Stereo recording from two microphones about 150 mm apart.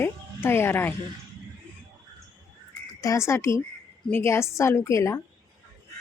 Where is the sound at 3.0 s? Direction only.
20° left (ahead or behind).